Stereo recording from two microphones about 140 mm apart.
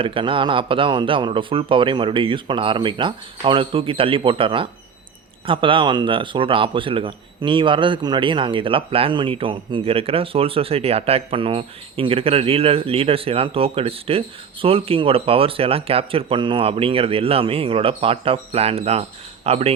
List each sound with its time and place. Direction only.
0.0 s speech: 40° right (ahead or behind)